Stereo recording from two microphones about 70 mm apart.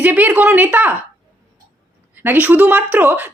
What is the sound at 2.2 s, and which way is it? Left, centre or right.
A woman's voice, right.